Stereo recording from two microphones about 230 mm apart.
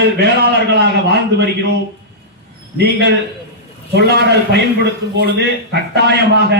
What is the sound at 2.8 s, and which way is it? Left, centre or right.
A man's voice, right.